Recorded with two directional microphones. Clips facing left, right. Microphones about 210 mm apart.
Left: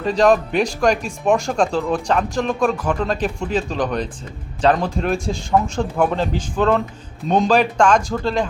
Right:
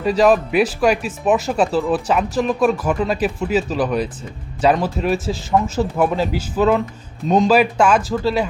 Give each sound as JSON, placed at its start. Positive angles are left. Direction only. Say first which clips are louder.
{"t": 0.0, "sound": "speech", "louder": "right 1 dB", "side_deg": -5}